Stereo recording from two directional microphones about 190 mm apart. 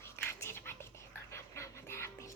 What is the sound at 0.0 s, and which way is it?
Whispering, 15° left (ahead or behind).